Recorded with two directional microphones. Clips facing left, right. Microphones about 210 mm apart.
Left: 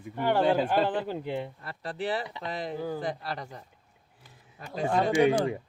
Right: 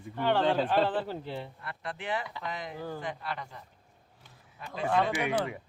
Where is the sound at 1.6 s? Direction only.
35° left (ahead or behind).